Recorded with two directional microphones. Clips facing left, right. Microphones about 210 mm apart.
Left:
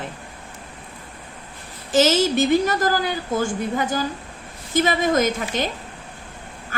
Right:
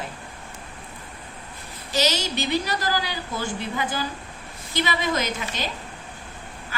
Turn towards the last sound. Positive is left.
turn(degrees=50)  # may be behind; listen again after turning